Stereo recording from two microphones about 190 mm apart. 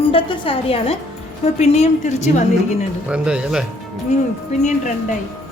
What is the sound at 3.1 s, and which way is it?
Speech, 5° right (ahead or behind).